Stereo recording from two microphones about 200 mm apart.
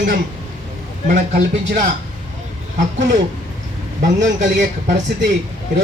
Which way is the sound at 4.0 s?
40° right (ahead or behind).